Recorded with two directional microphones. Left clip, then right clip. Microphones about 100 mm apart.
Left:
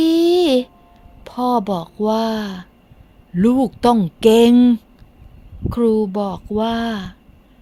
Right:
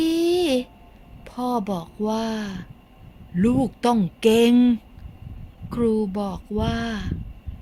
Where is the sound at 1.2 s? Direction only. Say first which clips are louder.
Left 7 dB; 60° left (ahead or behind).